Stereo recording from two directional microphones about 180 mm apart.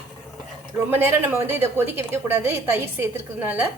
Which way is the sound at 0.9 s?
10° right (ahead or behind).